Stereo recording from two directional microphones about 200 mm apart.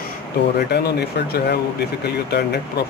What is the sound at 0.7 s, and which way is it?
Speech, 55° left (ahead or behind).